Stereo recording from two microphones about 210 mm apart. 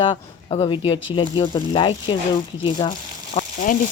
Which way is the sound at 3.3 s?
40° left (ahead or behind).